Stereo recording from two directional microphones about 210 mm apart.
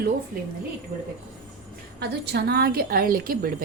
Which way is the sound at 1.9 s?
50° right (ahead or behind).